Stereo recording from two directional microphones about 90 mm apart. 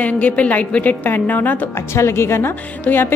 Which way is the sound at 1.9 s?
30° left (ahead or behind).